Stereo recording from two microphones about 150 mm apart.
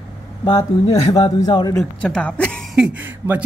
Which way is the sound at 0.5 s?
40° left (ahead or behind).